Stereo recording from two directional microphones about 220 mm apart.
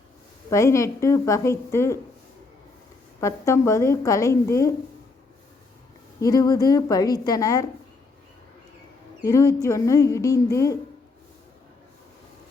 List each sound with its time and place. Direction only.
0.5 s a woman's voice: 15° left (ahead or behind)
3.2 s a woman's voice: 15° left (ahead or behind)
6.1 s a woman's voice: 15° left (ahead or behind)
9.2 s a woman's voice: 15° left (ahead or behind)